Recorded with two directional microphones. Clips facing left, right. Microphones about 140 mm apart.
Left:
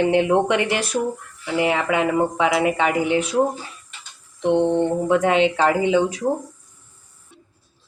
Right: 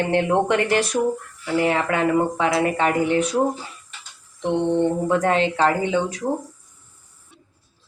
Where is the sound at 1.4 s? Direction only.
10° left (ahead or behind).